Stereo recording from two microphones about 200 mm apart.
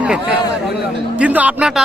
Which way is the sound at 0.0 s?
5° right (ahead or behind).